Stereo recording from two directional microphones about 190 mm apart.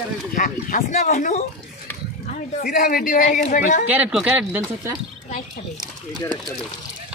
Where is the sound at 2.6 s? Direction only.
50° left (ahead or behind).